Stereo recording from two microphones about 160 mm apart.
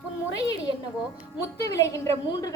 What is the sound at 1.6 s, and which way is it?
Speech, 20° left (ahead or behind).